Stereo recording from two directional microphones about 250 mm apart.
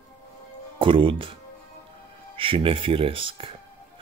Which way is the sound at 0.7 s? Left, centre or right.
Right.